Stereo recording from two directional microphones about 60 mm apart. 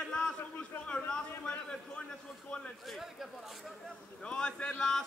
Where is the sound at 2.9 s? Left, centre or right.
Centre.